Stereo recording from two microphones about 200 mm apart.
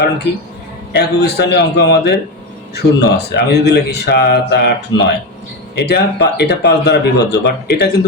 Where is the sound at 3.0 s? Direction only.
55° left (ahead or behind).